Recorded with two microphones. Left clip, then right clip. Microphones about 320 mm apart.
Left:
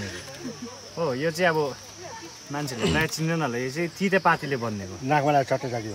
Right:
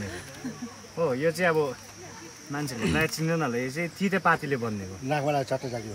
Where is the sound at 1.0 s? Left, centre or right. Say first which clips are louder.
Left 1 dB; left.